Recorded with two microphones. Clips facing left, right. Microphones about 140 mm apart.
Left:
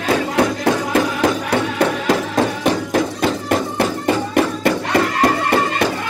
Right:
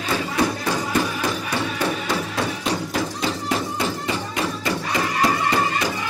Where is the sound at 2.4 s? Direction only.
50° left (ahead or behind).